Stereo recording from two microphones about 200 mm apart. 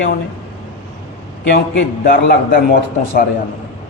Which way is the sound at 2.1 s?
45° left (ahead or behind).